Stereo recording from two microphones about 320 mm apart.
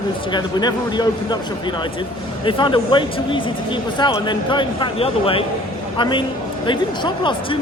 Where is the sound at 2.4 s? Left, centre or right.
Centre.